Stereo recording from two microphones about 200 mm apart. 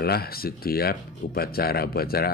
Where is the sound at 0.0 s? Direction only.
50° left (ahead or behind).